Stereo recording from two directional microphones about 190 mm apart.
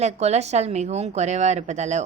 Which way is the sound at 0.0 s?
35° right (ahead or behind).